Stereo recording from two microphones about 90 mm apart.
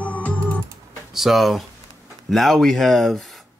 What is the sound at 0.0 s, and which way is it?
Music, 15° left (ahead or behind).